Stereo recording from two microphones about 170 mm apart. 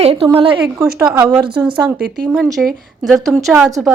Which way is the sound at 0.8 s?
20° right (ahead or behind).